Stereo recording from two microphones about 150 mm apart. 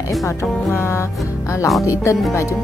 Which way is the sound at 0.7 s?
15° left (ahead or behind).